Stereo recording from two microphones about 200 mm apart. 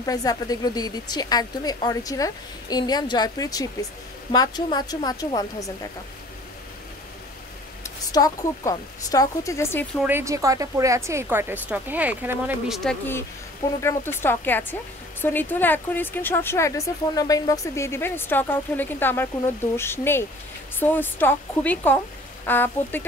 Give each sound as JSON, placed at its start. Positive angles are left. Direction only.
{"t": 0.0, "sound": "a woman's voice", "side_deg": 20}
{"t": 8.1, "sound": "speech", "side_deg": 15}
{"t": 10.0, "sound": "a woman's voice", "side_deg": -15}
{"t": 13.8, "sound": "speech", "side_deg": 10}